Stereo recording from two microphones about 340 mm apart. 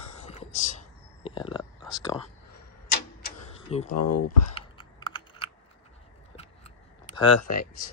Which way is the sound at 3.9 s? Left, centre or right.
Left.